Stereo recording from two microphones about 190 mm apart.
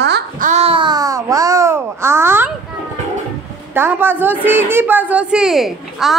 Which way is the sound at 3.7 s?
10° right (ahead or behind).